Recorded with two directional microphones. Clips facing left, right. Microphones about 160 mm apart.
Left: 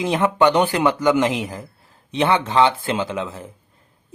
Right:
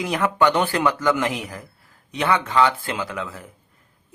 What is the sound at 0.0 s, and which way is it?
Speech, 25° left (ahead or behind).